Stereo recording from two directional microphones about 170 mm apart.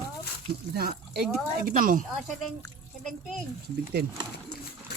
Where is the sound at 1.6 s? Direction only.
55° right (ahead or behind).